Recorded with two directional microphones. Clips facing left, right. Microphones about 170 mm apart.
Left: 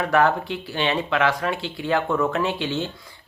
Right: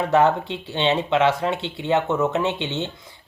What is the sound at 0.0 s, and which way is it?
Speech, 25° right (ahead or behind).